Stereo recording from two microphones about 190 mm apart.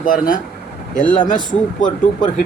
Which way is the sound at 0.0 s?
45° left (ahead or behind).